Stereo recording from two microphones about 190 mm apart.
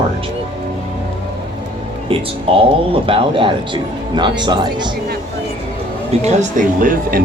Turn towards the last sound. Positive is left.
turn(degrees=-45)  # may be behind; listen again after turning